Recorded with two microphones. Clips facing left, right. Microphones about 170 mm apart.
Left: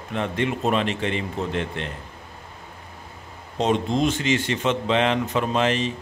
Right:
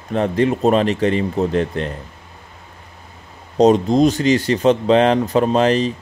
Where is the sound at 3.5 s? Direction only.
40° right (ahead or behind).